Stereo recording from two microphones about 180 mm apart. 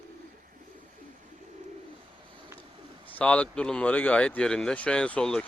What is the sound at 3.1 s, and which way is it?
Speech, 10° left (ahead or behind).